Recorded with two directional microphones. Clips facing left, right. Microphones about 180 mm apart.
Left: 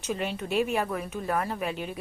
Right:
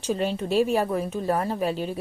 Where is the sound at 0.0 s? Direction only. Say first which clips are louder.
Right 5 dB; 30° right (ahead or behind).